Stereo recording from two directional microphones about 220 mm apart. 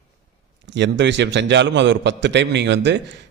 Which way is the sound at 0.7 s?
55° right (ahead or behind).